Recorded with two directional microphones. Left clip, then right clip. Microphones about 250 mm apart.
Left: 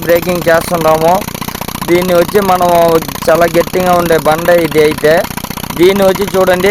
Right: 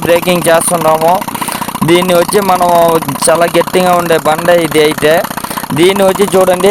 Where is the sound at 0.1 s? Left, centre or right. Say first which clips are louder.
Right 1 dB; right.